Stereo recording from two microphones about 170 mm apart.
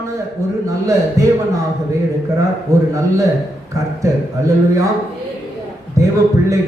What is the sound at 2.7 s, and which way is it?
Speech, 20° right (ahead or behind).